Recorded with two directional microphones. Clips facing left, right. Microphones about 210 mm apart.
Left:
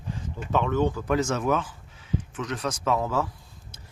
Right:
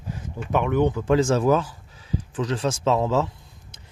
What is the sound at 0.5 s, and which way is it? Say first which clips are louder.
Speech: right 3 dB; 15° right (ahead or behind).